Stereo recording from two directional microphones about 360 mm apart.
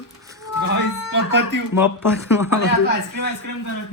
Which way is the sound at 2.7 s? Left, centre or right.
Left.